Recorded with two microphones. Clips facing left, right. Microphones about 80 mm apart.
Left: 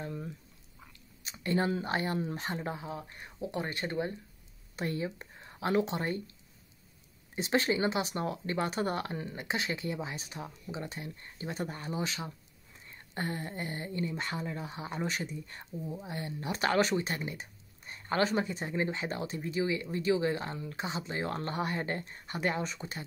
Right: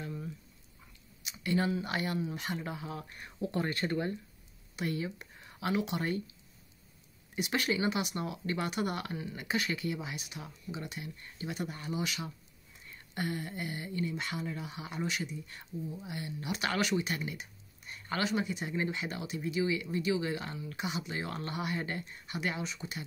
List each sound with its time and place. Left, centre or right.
0.0 s a sound: left
1.2 s speech: left
3.1 s speech: centre
4.7 s speech: left
7.3 s speech: left